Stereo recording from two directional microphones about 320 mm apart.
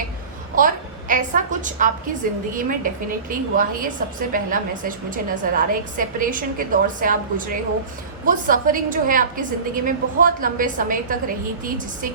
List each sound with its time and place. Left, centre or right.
0.5 s a woman's voice: right